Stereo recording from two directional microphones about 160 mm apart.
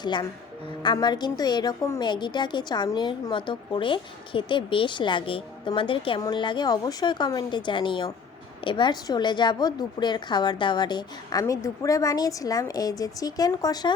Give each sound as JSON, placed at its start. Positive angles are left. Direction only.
{"t": 0.0, "sound": "a woman's voice", "side_deg": 25}